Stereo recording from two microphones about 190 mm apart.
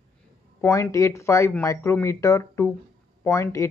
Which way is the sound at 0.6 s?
15° left (ahead or behind).